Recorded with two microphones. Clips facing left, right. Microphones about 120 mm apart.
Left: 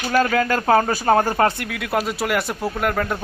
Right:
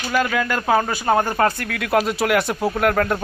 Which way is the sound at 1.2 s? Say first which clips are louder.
Left 1 dB; 25° left (ahead or behind).